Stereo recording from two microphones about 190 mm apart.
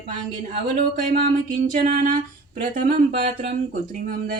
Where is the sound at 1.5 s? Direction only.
45° right (ahead or behind).